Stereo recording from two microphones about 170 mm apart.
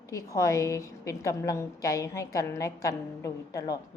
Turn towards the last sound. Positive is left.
turn(degrees=20)  # may be behind; listen again after turning